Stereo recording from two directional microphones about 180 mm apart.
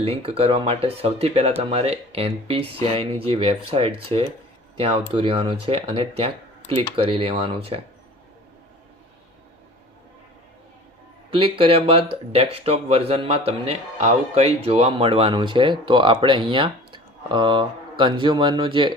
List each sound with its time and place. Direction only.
0.0 s speech: 30° right (ahead or behind)
11.3 s speech: 30° right (ahead or behind)